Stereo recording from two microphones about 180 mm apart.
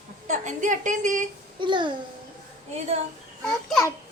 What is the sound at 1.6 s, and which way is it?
Speech, 25° right (ahead or behind).